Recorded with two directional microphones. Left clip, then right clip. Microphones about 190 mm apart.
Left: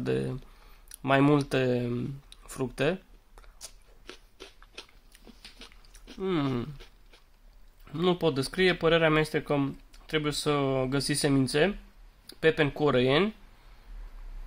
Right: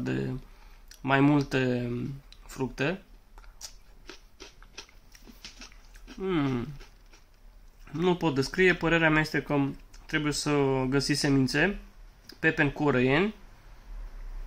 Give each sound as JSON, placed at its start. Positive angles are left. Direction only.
{"t": 0.0, "sound": "speech", "side_deg": 55}
{"t": 0.8, "sound": "a sound", "side_deg": 55}
{"t": 7.8, "sound": "speech", "side_deg": 50}